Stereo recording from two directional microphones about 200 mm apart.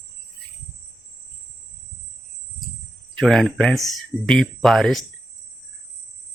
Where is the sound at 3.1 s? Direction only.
Centre (ahead or behind).